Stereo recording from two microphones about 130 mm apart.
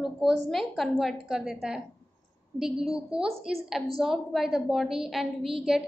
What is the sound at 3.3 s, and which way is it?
Speech, 50° right (ahead or behind).